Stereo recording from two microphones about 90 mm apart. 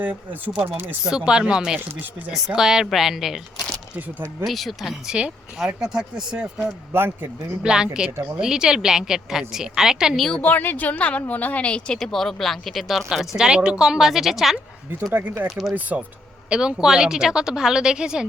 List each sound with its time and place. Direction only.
0.5 s speech: 10° right (ahead or behind)
3.9 s speech: 25° right (ahead or behind)
4.4 s speech: centre (ahead or behind)
6.9 s speech: 25° right (ahead or behind)
7.6 s speech: 10° right (ahead or behind)
10.4 s a woman's voice: 20° left (ahead or behind); by 15.7 s 5° right (ahead or behind)
15.7 s speech: 15° right (ahead or behind)